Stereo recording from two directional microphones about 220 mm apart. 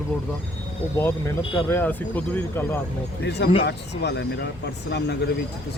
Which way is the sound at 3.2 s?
50° left (ahead or behind).